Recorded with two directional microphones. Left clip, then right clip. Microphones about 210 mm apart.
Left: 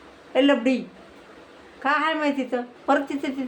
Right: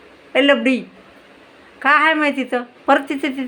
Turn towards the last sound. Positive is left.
turn(degrees=-15)  # may be behind; listen again after turning